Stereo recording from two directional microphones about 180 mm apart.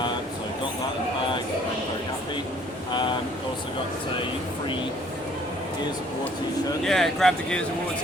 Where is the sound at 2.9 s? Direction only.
25° left (ahead or behind).